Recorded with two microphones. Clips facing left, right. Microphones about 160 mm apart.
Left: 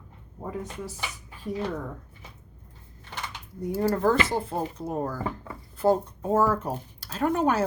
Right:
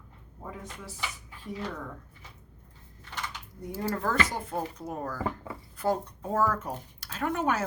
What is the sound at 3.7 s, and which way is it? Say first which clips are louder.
A woman's voice: left 6 dB; 35° left (ahead or behind).